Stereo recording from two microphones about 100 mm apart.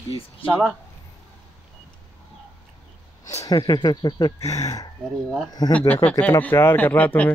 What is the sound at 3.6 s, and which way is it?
Speech, 50° left (ahead or behind).